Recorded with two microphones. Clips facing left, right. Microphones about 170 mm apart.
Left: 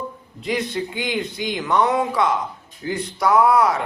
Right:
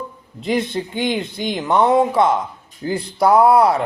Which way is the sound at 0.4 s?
25° right (ahead or behind).